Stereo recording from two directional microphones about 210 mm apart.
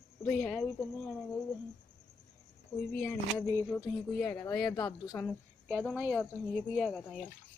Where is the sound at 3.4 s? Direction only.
15° right (ahead or behind).